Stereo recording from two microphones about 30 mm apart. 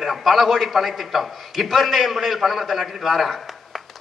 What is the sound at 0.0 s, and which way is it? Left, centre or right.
A man's voice, centre.